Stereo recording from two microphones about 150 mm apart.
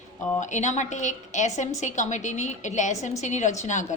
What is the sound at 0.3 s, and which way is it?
A woman's voice, 55° left (ahead or behind).